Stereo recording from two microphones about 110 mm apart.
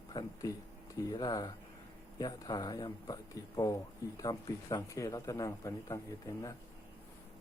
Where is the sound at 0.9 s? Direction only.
35° left (ahead or behind).